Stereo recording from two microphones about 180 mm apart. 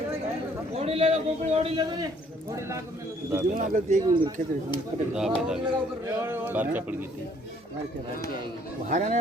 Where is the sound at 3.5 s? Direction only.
45° right (ahead or behind).